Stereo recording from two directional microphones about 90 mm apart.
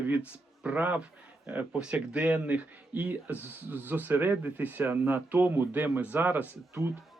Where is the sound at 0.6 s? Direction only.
15° right (ahead or behind).